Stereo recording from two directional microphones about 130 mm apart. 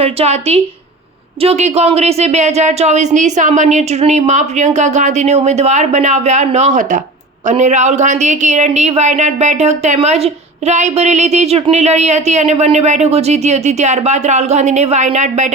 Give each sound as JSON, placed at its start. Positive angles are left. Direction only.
{"t": 0.0, "sound": "a woman's voice", "side_deg": -50}